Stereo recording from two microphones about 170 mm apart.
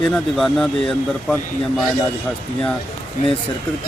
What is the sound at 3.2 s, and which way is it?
Speech, 50° left (ahead or behind).